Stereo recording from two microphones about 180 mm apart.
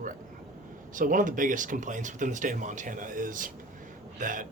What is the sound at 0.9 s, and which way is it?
Speech, 45° right (ahead or behind).